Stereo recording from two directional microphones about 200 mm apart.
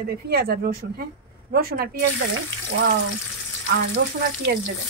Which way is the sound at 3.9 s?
50° right (ahead or behind).